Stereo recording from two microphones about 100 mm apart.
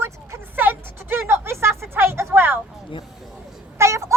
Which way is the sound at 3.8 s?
30° right (ahead or behind).